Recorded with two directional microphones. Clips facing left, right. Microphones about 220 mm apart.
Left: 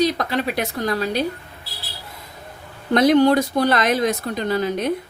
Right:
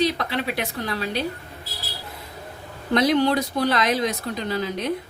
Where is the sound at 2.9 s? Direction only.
50° left (ahead or behind).